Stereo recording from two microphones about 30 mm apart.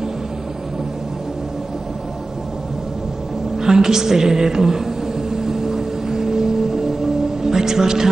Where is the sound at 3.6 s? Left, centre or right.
Centre.